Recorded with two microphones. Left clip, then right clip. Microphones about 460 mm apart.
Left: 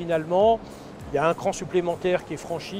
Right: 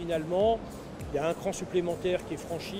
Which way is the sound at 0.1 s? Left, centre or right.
Left.